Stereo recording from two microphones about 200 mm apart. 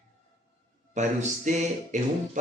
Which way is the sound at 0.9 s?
35° right (ahead or behind).